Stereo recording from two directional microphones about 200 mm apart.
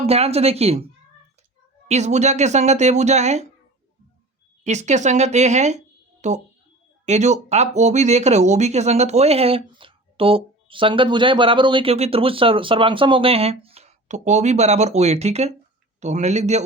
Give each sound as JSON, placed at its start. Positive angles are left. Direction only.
{"t": 0.0, "sound": "speech", "side_deg": -30}
{"t": 1.9, "sound": "speech", "side_deg": -35}
{"t": 4.6, "sound": "speech", "side_deg": -35}